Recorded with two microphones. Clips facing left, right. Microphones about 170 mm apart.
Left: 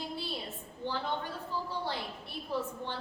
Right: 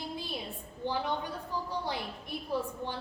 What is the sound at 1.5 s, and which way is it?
Speech, 15° right (ahead or behind).